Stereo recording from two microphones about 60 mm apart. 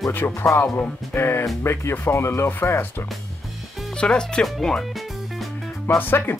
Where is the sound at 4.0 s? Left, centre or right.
Centre.